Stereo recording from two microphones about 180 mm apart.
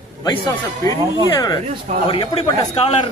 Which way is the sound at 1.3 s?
25° left (ahead or behind).